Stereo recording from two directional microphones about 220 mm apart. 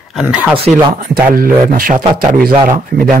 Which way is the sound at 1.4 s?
40° right (ahead or behind).